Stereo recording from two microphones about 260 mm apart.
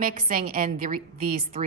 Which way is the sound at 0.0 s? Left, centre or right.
Right.